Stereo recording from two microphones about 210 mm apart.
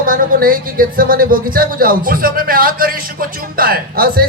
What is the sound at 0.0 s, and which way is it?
Speech, 40° right (ahead or behind).